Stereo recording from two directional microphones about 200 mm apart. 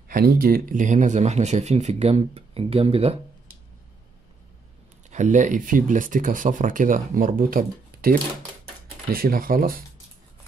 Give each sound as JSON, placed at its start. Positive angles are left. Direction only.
{"t": 0.1, "sound": "speech", "side_deg": -50}
{"t": 5.1, "sound": "speech", "side_deg": -40}
{"t": 9.1, "sound": "speech", "side_deg": -45}